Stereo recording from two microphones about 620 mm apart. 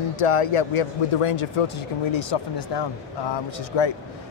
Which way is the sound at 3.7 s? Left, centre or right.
Left.